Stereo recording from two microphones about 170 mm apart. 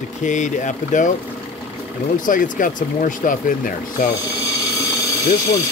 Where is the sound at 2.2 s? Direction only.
55° left (ahead or behind).